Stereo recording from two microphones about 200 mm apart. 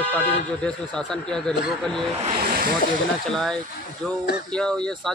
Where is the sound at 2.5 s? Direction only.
45° right (ahead or behind).